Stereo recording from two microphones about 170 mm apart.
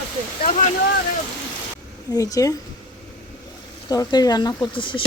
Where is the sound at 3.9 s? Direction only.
20° left (ahead or behind).